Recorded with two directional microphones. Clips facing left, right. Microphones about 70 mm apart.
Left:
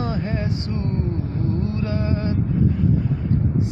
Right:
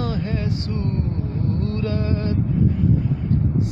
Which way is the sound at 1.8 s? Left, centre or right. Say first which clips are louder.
Even; centre.